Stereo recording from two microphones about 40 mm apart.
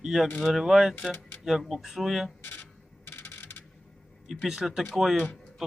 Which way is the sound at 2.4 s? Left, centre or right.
Left.